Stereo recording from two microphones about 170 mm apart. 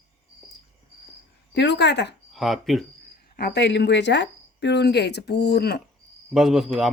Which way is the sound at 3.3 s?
80° left.